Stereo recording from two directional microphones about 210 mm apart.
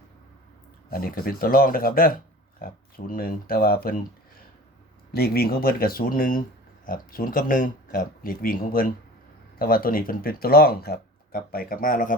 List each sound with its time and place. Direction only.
0.9 s speech: 45° left (ahead or behind)
5.1 s speech: 45° left (ahead or behind)